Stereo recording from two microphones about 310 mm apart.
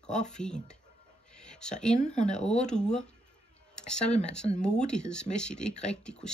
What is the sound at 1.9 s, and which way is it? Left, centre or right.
Speech, left.